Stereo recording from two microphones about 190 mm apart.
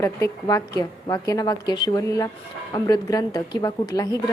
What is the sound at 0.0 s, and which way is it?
A woman's voice, 15° left (ahead or behind).